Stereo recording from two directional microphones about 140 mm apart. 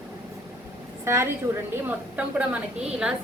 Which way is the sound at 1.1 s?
20° right (ahead or behind).